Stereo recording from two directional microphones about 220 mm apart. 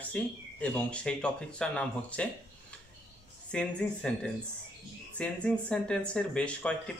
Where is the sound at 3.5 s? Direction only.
5° left (ahead or behind).